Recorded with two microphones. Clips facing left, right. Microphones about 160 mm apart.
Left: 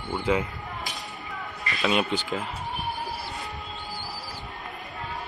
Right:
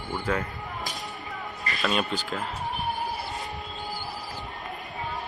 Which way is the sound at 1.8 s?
5° left (ahead or behind).